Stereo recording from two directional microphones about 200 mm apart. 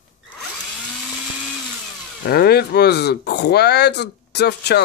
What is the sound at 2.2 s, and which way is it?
Speech, 50° left (ahead or behind).